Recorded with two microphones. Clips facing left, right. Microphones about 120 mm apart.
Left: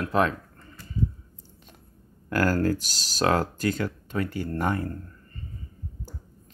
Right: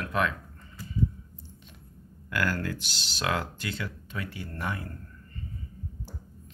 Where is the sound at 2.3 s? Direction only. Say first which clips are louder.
Left 7 dB; 40° left (ahead or behind).